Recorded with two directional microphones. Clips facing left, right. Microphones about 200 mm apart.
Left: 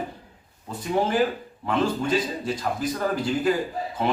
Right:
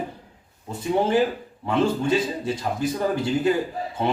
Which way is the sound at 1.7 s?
25° right (ahead or behind).